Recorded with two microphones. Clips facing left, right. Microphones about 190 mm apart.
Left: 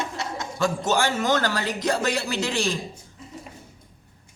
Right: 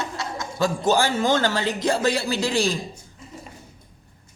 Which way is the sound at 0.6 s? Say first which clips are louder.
Right 3 dB; 35° right (ahead or behind).